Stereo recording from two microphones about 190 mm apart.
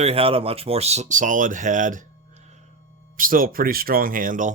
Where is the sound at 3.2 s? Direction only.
50° right (ahead or behind).